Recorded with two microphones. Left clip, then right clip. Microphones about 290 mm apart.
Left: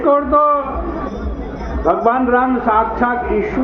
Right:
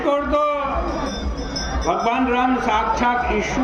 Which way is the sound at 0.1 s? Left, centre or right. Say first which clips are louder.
Left 7 dB; centre.